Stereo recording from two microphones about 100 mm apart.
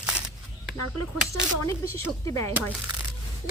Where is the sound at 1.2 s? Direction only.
25° left (ahead or behind).